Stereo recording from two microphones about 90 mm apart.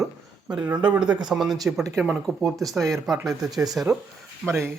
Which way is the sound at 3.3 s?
40° right (ahead or behind).